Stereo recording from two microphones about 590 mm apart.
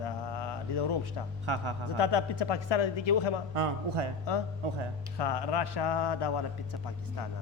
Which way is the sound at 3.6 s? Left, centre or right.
Right.